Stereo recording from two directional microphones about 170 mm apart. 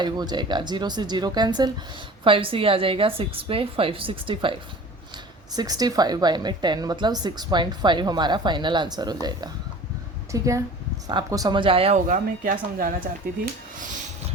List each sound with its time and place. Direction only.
0.0 s a woman's voice: 25° right (ahead or behind)
12.0 s speech: 50° right (ahead or behind)